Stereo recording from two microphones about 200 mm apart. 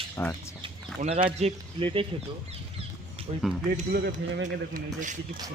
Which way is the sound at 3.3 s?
30° right (ahead or behind).